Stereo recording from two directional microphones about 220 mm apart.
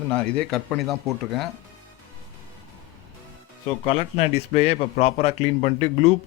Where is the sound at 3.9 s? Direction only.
30° left (ahead or behind).